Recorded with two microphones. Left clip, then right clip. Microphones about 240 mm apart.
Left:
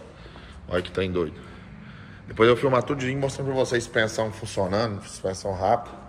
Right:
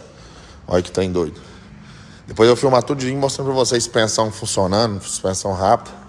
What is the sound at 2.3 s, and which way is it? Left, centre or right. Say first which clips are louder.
Speech: right 6 dB; centre.